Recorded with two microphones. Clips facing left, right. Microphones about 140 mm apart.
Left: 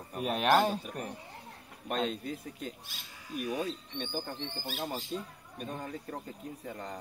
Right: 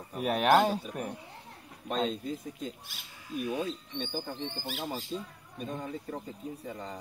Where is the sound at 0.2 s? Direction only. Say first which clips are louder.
Right 3 dB; 60° right (ahead or behind).